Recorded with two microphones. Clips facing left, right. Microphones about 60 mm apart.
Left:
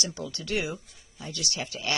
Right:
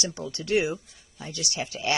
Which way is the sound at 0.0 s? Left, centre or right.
Right.